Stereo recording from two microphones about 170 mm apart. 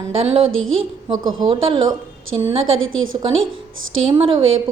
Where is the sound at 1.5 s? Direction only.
30° right (ahead or behind).